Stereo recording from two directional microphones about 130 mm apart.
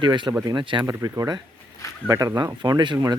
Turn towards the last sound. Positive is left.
turn(degrees=-35)  # may be behind; listen again after turning